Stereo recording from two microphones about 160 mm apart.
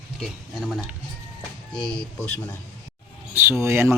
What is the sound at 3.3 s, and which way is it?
Speech, 15° right (ahead or behind).